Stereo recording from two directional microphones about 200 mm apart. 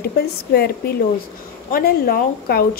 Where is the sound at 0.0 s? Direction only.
50° left (ahead or behind).